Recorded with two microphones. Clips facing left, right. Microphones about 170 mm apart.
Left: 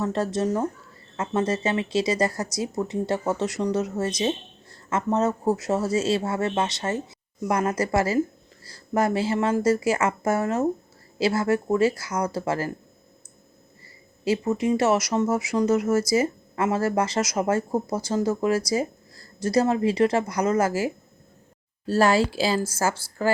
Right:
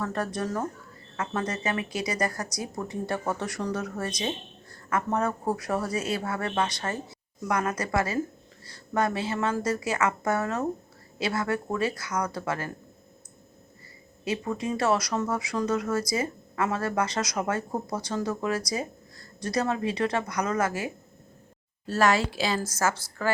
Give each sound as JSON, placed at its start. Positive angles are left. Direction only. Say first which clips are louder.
{"t": 0.0, "sound": "speech", "louder": "left 5 dB", "side_deg": 25}
{"t": 14.3, "sound": "a woman's voice", "louder": "left 7 dB", "side_deg": 25}